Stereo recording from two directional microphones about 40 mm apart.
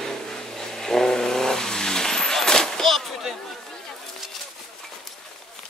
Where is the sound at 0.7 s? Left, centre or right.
Centre.